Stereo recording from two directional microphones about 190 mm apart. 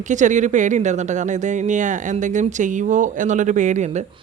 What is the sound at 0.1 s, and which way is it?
Speech, 40° right (ahead or behind).